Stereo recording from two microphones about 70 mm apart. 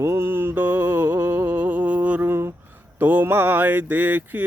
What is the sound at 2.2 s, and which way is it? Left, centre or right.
Speech, right.